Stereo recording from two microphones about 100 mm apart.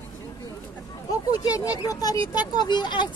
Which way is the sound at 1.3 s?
35° left (ahead or behind).